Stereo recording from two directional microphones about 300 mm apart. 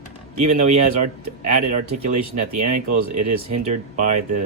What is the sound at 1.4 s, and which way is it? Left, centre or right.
Speech, right.